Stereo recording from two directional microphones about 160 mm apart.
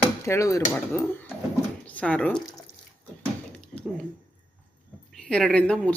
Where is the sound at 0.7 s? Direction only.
10° left (ahead or behind).